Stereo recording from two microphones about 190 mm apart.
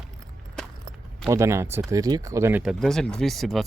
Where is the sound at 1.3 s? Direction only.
15° right (ahead or behind).